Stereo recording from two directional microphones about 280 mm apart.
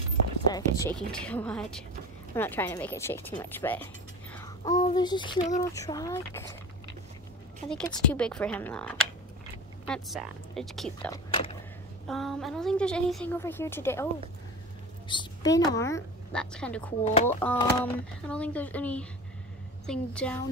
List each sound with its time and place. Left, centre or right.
0.5 s a woman's voice: centre
7.6 s a woman's voice: centre
11.1 s speech: centre
12.1 s a woman's voice: centre
15.0 s a woman's voice: centre